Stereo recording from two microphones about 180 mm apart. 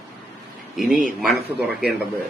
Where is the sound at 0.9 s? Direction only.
50° right (ahead or behind).